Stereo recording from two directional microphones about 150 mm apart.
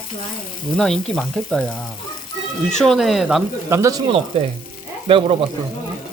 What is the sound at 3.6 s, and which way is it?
Speech, 20° right (ahead or behind).